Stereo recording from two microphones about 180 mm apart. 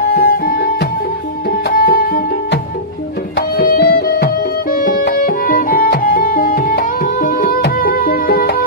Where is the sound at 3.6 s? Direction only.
60° left (ahead or behind).